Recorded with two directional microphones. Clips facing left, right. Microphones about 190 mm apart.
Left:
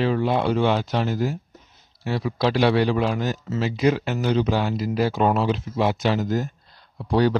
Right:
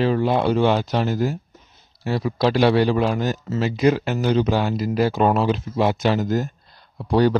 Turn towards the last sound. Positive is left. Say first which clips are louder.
# right 2 dB
turn(degrees=-45)  # may be behind; listen again after turning